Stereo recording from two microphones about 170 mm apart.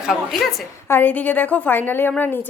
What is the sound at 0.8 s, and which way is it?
A woman's voice, 10° left (ahead or behind).